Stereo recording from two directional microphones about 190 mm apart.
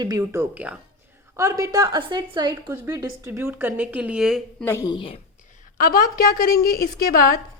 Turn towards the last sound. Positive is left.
turn(degrees=50)  # may be behind; listen again after turning